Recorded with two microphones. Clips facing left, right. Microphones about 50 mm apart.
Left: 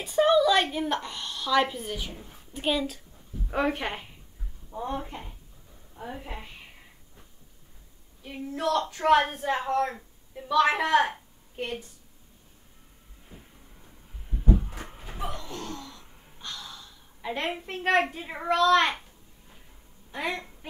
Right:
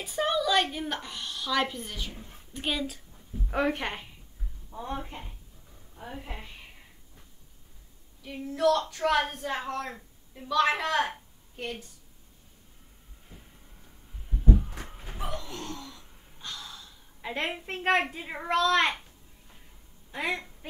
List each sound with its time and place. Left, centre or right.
0.0 s a woman's voice: centre
8.2 s speech: left
9.9 s a woman's voice: centre
10.7 s a woman's voice: left
14.5 s a sound: centre
15.1 s gasp: centre
17.3 s a woman's voice: centre
20.1 s a woman's voice: centre